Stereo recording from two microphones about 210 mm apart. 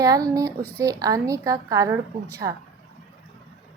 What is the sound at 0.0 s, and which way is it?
A woman's voice, 15° right (ahead or behind).